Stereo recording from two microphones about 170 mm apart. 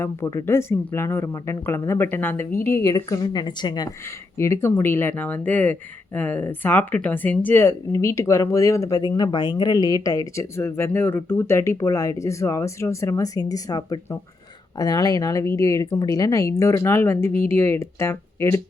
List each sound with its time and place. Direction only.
0.0 s a woman's voice: 20° left (ahead or behind)